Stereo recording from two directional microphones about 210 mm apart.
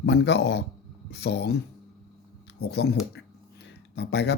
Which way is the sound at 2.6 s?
50° left (ahead or behind).